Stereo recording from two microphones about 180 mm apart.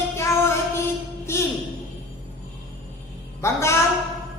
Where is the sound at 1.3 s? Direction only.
15° left (ahead or behind).